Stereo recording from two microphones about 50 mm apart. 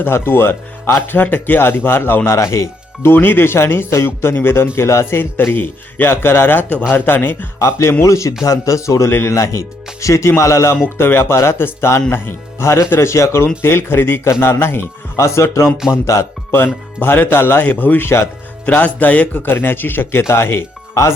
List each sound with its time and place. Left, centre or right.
0.0 s speech: left
2.3 s a man's voice: left
3.0 s speech: left
6.1 s speech: left
7.6 s speech: left
8.0 s a man's voice: left
9.0 s speech: left
9.3 s speech: left
10.8 s speech: left
13.6 s speech: left
15.2 s speech: left
15.9 s speech: left
16.5 s speech: left
18.6 s speech: left